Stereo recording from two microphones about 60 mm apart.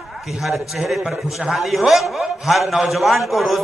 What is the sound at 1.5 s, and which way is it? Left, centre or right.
A man's voice, centre.